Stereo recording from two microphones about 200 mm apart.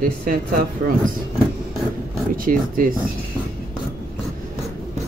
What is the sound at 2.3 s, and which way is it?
Speech, 45° right (ahead or behind).